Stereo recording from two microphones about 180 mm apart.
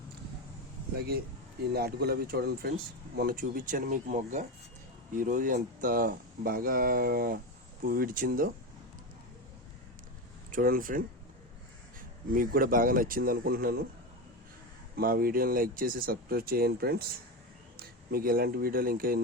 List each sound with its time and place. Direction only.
1.7 s speech: 60° right (ahead or behind)
10.5 s speech: 50° right (ahead or behind)
14.9 s speech: 55° right (ahead or behind)